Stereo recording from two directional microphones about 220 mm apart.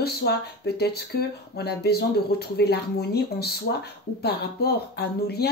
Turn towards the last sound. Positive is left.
turn(degrees=45)  # may be behind; listen again after turning